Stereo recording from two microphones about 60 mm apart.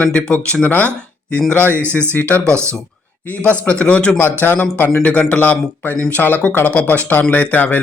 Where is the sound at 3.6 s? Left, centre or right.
Left.